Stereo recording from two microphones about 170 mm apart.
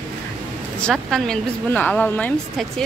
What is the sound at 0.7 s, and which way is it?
Speech, 5° left (ahead or behind).